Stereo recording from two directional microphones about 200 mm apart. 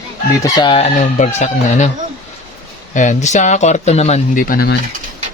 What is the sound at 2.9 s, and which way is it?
Speech, 35° left (ahead or behind).